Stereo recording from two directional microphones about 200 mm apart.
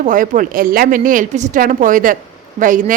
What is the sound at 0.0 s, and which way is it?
A woman's voice, 40° right (ahead or behind).